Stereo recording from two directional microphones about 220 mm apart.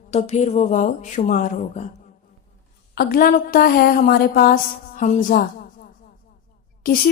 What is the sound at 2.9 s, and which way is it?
A woman's voice, 40° left (ahead or behind).